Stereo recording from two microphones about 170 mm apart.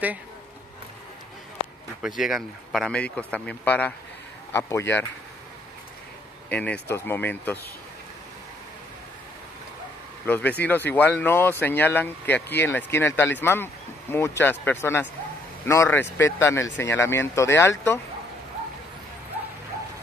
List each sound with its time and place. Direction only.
2.0 s speech: centre (ahead or behind); by 5.0 s 15° left (ahead or behind)
6.5 s speech: 10° left (ahead or behind)
10.2 s speech: 10° left (ahead or behind)